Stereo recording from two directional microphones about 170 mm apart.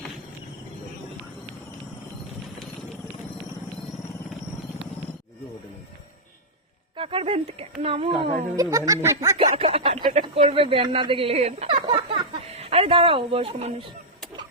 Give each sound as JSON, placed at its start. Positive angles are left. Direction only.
{"t": 6.9, "sound": "speech", "side_deg": -30}
{"t": 7.8, "sound": "a sound", "side_deg": -30}
{"t": 8.5, "sound": "music", "side_deg": -20}
{"t": 9.4, "sound": "a sound", "side_deg": -35}
{"t": 10.0, "sound": "speech", "side_deg": -45}
{"t": 10.3, "sound": "speech", "side_deg": -30}